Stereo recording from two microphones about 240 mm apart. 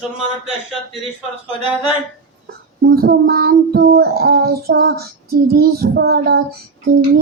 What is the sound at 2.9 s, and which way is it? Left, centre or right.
Child singing, right.